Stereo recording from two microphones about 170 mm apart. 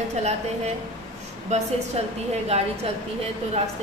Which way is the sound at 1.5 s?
40° right (ahead or behind).